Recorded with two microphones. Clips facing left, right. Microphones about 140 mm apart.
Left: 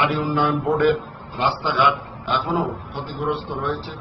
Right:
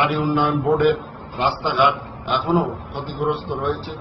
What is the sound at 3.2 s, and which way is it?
Speech, 20° right (ahead or behind).